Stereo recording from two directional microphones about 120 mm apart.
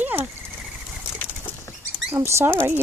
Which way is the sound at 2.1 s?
20° right (ahead or behind).